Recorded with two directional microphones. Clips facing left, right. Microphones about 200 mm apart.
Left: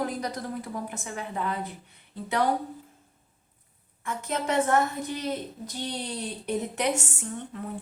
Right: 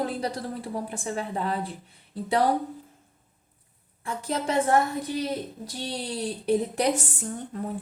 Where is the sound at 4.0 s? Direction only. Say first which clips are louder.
Right 1 dB; 30° right (ahead or behind).